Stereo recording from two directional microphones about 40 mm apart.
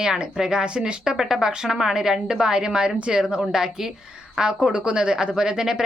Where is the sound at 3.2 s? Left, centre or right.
Centre.